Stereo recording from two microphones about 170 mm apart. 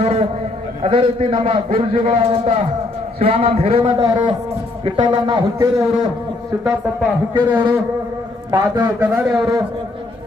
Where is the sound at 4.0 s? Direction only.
25° right (ahead or behind).